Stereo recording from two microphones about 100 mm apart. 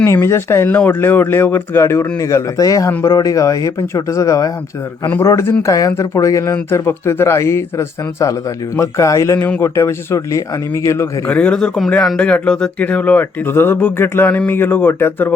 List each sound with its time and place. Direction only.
0.0 s speech: 30° left (ahead or behind)
5.6 s speech: 35° left (ahead or behind)
11.3 s speech: 15° left (ahead or behind)